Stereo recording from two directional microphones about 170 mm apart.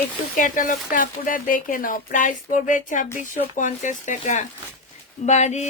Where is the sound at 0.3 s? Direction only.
50° left (ahead or behind).